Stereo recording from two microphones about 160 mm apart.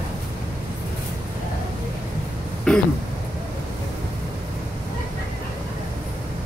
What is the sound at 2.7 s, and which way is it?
Throat clearing, 5° left (ahead or behind).